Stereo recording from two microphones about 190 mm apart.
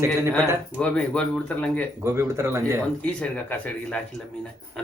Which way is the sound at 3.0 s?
5° left (ahead or behind).